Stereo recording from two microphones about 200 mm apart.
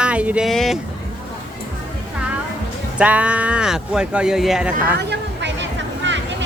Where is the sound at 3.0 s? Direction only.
5° right (ahead or behind).